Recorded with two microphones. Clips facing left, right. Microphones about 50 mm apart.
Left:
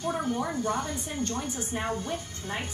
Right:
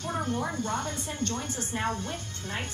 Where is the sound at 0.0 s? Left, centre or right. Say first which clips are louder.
Left 1 dB; centre.